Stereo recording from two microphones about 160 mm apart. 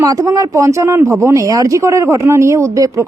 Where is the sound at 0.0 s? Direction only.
20° right (ahead or behind).